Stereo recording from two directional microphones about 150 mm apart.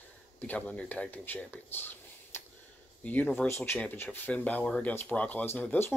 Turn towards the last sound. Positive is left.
turn(degrees=15)  # may be behind; listen again after turning